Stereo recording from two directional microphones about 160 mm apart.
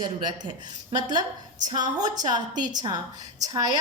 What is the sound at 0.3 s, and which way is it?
Speech, 30° right (ahead or behind).